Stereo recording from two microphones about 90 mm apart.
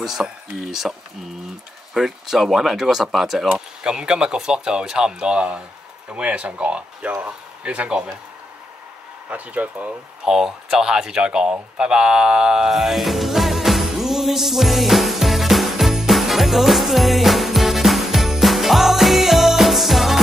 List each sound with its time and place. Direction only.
0.0 s speech: 5° right (ahead or behind)
2.0 s speech: 5° right (ahead or behind)
9.3 s speech: 15° right (ahead or behind)
10.2 s a sound: 5° right (ahead or behind)